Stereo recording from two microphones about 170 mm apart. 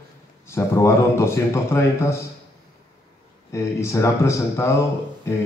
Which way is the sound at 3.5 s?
20° left (ahead or behind).